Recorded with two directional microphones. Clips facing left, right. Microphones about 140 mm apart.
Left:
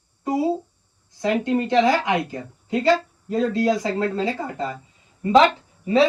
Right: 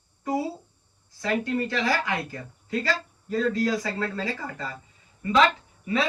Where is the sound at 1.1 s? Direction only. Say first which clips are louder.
Left 5 dB; 20° left (ahead or behind).